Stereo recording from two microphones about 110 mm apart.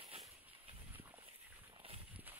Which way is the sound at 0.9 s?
15° right (ahead or behind).